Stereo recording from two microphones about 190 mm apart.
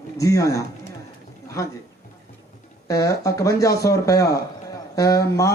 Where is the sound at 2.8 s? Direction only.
15° left (ahead or behind).